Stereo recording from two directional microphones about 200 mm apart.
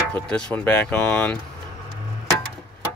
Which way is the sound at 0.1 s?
5° left (ahead or behind).